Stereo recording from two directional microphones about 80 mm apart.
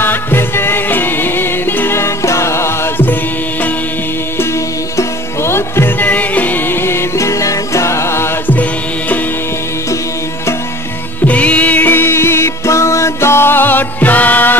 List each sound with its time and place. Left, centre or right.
0.0 s music: left
4.9 s music: left
11.2 s music: centre